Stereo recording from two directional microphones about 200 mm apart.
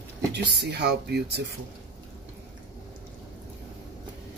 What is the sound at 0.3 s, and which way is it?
Speech, 55° right (ahead or behind).